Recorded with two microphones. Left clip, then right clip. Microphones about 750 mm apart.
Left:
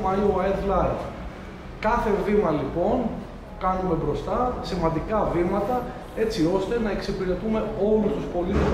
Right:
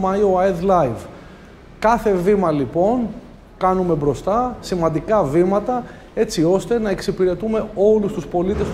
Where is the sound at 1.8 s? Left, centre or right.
Right.